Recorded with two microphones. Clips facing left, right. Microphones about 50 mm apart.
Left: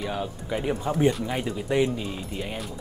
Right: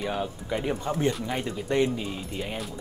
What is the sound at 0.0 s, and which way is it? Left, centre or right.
Speech, centre.